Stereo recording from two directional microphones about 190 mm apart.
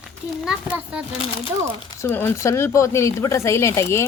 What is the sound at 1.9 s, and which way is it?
Speech, 15° left (ahead or behind).